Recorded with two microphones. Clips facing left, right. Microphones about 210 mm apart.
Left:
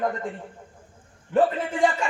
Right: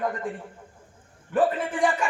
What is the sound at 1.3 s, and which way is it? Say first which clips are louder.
Speech: left 2 dB; 25° left (ahead or behind).